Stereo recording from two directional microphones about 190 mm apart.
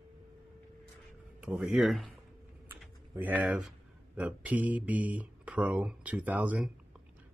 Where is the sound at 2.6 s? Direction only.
10° right (ahead or behind).